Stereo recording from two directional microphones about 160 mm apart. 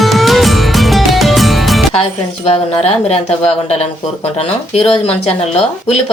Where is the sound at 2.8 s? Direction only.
40° left (ahead or behind).